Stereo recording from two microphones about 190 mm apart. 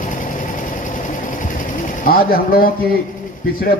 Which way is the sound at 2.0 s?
50° left (ahead or behind).